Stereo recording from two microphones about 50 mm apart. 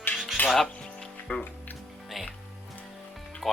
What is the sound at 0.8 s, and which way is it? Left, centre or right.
Music, centre.